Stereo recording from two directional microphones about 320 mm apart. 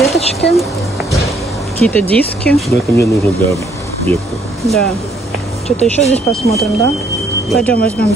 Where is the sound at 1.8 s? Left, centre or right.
Centre.